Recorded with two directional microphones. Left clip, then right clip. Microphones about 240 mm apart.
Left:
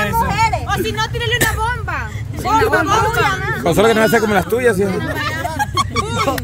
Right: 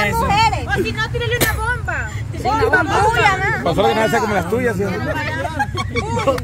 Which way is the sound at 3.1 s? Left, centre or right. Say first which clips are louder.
Right 2 dB; centre.